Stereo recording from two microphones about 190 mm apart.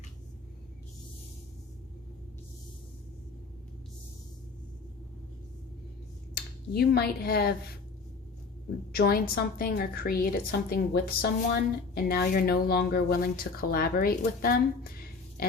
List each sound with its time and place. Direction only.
6.3 s speech: 55° left (ahead or behind)
8.9 s speech: 55° left (ahead or behind)